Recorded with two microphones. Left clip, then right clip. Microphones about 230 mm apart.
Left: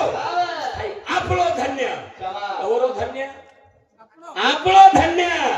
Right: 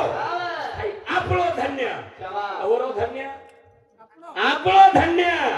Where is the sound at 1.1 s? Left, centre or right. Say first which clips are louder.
Left 2 dB; left.